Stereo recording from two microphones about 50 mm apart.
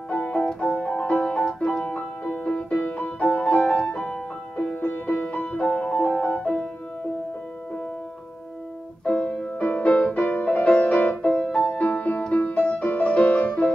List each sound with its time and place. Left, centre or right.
0.1 s piano: left
1.1 s music: left
1.4 s music: centre
4.7 s music: left
9.0 s music: left